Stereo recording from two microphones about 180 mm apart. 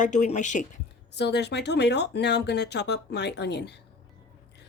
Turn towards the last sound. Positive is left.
turn(degrees=70)  # may be behind; listen again after turning